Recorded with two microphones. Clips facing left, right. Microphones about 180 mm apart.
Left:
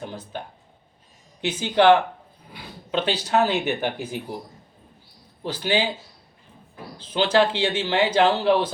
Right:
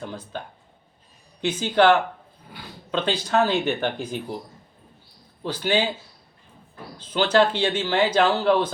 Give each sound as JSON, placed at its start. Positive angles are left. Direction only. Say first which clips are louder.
{"t": 0.0, "sound": "speech", "louder": "even", "side_deg": 15}
{"t": 1.5, "sound": "speech", "louder": "left 1 dB", "side_deg": 15}
{"t": 2.5, "sound": "a sound", "louder": "left 1 dB", "side_deg": 10}
{"t": 3.2, "sound": "speech", "louder": "right 1 dB", "side_deg": 15}
{"t": 5.4, "sound": "speech", "louder": "right 1 dB", "side_deg": 10}
{"t": 6.9, "sound": "speech", "louder": "even", "side_deg": 15}